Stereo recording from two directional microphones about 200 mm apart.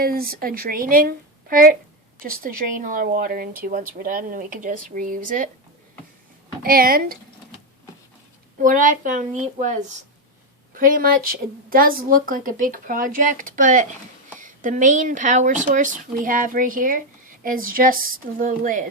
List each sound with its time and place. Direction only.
0.0 s a woman's voice: 45° right (ahead or behind)
6.6 s a woman's voice: 45° right (ahead or behind)
8.6 s a woman's voice: 40° right (ahead or behind)